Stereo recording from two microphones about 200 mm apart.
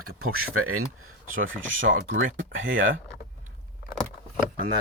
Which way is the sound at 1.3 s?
75° right (ahead or behind).